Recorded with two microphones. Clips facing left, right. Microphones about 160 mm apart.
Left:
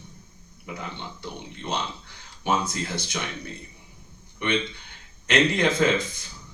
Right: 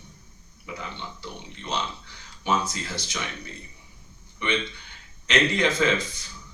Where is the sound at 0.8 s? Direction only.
55° left (ahead or behind).